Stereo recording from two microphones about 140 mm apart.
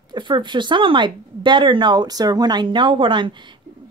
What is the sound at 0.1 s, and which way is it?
Speech, 35° right (ahead or behind).